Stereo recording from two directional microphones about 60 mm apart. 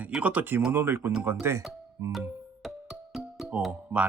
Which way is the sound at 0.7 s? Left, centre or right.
Right.